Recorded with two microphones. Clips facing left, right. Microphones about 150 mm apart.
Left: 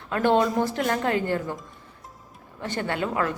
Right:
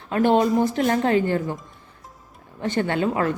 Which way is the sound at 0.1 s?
15° right (ahead or behind).